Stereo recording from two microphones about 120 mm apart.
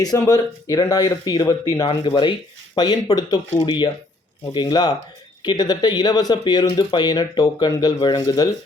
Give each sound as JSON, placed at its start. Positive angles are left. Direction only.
{"t": 0.0, "sound": "speech", "side_deg": 30}
{"t": 1.8, "sound": "speech", "side_deg": 45}